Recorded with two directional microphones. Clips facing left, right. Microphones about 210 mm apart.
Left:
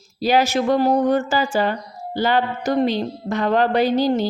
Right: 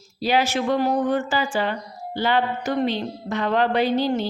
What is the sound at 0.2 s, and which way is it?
A woman's voice, 40° left (ahead or behind).